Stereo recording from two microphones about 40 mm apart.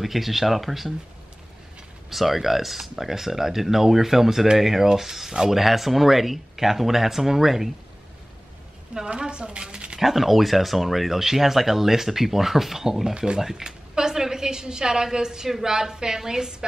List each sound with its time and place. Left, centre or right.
0.0 s speech: centre
2.0 s speech: centre
9.1 s a woman's voice: right
9.9 s a woman's voice: centre